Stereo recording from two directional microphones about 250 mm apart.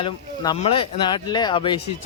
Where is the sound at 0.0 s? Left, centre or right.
Left.